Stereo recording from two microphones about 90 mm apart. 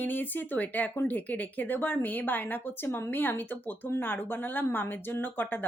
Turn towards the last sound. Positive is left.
turn(degrees=20)  # may be behind; listen again after turning